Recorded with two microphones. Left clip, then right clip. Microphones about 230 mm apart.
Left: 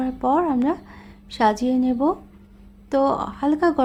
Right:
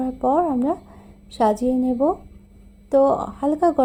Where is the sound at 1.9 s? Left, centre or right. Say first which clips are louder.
Right 1 dB; centre.